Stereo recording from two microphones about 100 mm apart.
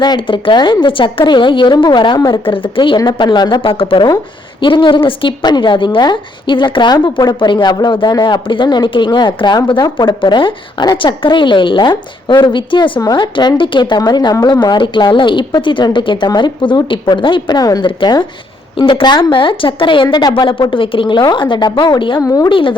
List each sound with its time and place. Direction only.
0.0 s a woman's voice: 50° left (ahead or behind)
2.3 s a woman's voice: 60° left (ahead or behind)
3.6 s a woman's voice: 65° left (ahead or behind); by 17.8 s 40° left (ahead or behind)
17.8 s a woman's voice: 50° left (ahead or behind)
22.2 s speech: 35° left (ahead or behind)
22.4 s speech: 60° left (ahead or behind)